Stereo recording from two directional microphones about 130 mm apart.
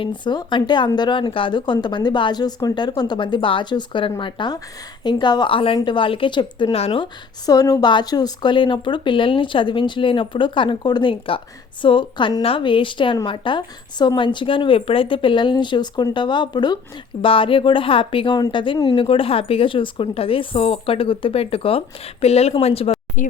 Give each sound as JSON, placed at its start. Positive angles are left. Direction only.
{"t": 0.0, "sound": "speech", "side_deg": 35}
{"t": 7.4, "sound": "speech", "side_deg": 30}
{"t": 23.2, "sound": "speech", "side_deg": 90}